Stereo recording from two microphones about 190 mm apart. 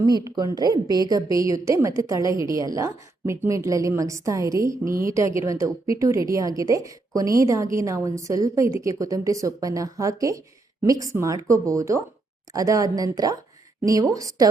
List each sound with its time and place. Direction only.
0.0 s a woman's voice: 20° right (ahead or behind)